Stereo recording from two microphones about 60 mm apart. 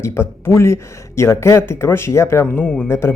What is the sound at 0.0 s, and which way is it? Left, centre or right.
Speech, left.